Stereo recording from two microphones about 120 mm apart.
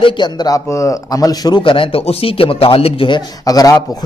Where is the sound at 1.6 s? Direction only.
45° left (ahead or behind).